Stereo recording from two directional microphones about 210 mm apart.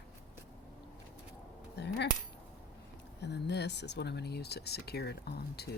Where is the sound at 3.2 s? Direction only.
55° left (ahead or behind).